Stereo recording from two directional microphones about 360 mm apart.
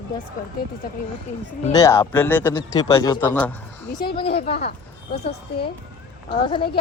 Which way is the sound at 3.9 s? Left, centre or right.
Left.